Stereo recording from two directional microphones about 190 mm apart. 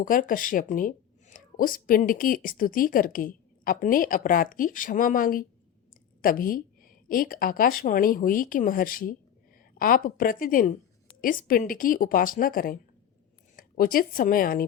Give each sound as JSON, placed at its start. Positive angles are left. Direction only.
{"t": 0.0, "sound": "speech", "side_deg": 45}